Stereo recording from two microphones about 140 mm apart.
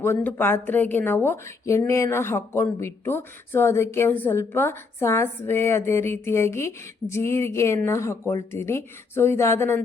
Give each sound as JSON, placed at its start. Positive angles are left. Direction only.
{"t": 0.0, "sound": "speech", "side_deg": 15}